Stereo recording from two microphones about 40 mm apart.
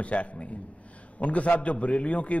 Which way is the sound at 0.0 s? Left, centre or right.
Left.